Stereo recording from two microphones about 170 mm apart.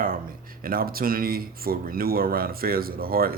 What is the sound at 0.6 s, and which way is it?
Speech, 60° right (ahead or behind).